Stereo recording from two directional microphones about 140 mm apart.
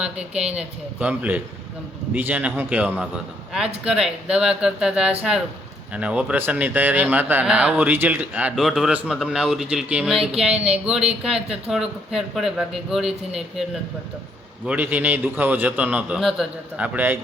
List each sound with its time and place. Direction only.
0.0 s a man's voice: 5° right (ahead or behind)
14.7 s a man's voice: 10° right (ahead or behind)